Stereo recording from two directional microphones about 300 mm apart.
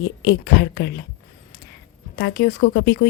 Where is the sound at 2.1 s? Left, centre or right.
Left.